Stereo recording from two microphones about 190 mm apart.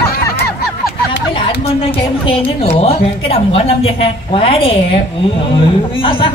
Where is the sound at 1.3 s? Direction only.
30° left (ahead or behind).